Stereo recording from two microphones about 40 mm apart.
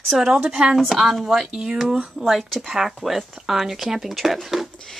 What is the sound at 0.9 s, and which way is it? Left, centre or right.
Speech, centre.